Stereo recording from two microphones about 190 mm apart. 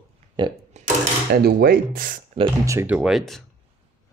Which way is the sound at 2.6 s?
15° right (ahead or behind).